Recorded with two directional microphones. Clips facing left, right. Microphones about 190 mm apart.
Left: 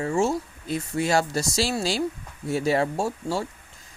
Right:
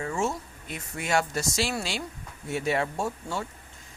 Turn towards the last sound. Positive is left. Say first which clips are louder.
# left 5 dB
turn(degrees=35)  # may be behind; listen again after turning